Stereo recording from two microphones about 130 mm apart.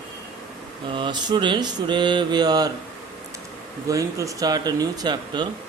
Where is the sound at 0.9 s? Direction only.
35° right (ahead or behind).